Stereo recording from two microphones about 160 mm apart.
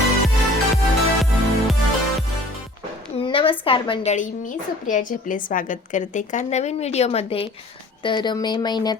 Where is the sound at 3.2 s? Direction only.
35° left (ahead or behind).